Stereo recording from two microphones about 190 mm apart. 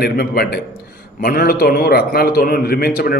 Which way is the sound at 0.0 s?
55° left (ahead or behind).